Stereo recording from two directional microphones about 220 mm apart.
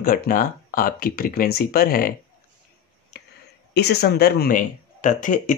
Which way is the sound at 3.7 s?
50° left (ahead or behind).